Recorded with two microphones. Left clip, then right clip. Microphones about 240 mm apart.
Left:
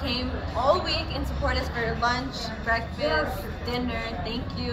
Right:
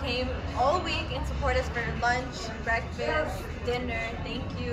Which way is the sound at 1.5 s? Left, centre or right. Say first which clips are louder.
Even; centre.